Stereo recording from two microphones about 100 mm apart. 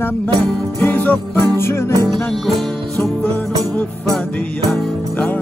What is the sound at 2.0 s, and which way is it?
Music, centre (ahead or behind).